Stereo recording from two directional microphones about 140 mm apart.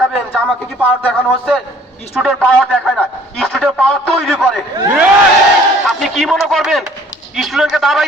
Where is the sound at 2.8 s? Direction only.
Centre (ahead or behind).